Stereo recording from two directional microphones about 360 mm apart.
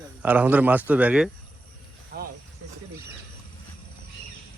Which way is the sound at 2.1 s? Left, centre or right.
Right.